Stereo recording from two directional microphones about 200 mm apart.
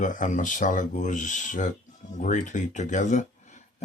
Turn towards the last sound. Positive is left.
turn(degrees=40)  # may be behind; listen again after turning